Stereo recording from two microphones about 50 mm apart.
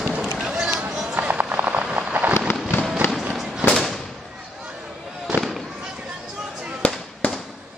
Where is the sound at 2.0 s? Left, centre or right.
Right.